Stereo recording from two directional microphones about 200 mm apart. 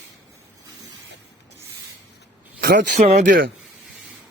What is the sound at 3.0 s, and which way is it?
Speech, 35° right (ahead or behind).